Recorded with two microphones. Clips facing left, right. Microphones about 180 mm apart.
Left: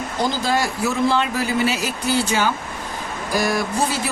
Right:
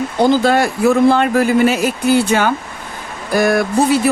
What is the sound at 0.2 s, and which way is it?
Speech, 60° right (ahead or behind).